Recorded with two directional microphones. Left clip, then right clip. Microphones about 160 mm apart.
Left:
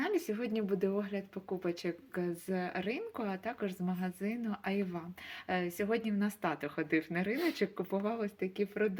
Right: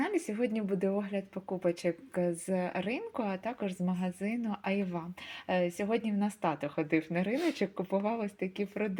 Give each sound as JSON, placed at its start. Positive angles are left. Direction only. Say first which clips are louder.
{"t": 0.0, "sound": "speech", "louder": "right 2 dB", "side_deg": -30}